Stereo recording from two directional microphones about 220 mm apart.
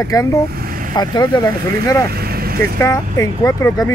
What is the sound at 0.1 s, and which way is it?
Speech, 15° left (ahead or behind).